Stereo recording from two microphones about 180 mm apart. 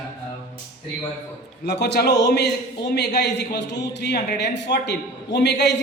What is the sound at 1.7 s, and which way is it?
A man's voice, 65° left (ahead or behind).